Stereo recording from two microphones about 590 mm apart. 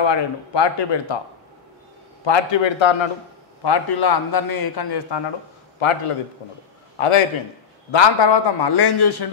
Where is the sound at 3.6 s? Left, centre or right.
Left.